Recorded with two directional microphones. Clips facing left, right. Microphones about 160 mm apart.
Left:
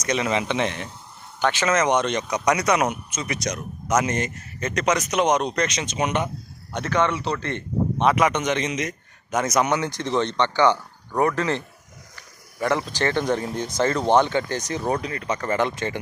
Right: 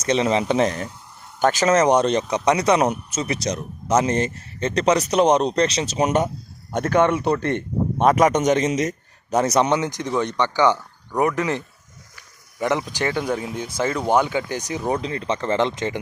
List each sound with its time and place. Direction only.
0.0 s a man's voice: 30° right (ahead or behind); by 15.0 s 10° right (ahead or behind)
15.0 s speech: 25° right (ahead or behind)